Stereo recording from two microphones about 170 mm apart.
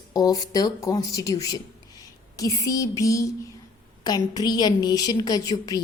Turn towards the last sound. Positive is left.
turn(degrees=20)  # may be behind; listen again after turning